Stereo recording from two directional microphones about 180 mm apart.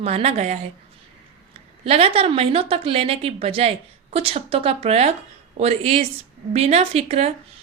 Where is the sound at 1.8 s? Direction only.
35° right (ahead or behind).